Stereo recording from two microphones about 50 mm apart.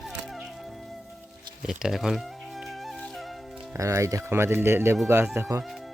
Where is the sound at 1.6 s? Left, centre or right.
Centre.